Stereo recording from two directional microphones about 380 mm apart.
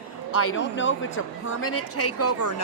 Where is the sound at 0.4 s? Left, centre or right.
Left.